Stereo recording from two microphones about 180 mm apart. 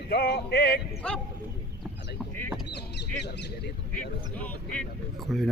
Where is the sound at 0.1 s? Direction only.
65° left (ahead or behind).